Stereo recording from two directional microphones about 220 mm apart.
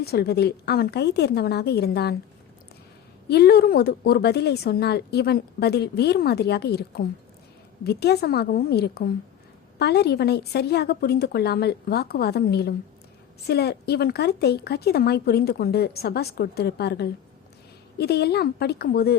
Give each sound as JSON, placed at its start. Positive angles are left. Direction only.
{"t": 0.0, "sound": "a woman's voice", "side_deg": 45}
{"t": 3.2, "sound": "a woman's voice", "side_deg": 45}